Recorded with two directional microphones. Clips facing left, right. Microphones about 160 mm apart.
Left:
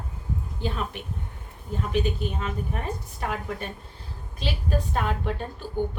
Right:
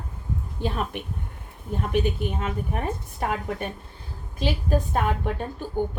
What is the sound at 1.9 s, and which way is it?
A woman's voice, 55° right (ahead or behind).